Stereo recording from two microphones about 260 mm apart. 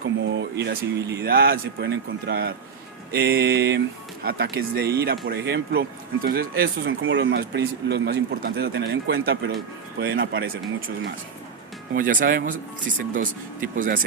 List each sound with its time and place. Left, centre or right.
0.0 s speech: right
13.7 s speech: right